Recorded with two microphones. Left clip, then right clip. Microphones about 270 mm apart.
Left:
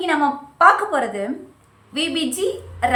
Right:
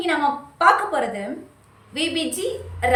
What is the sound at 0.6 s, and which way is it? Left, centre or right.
A woman's voice, centre.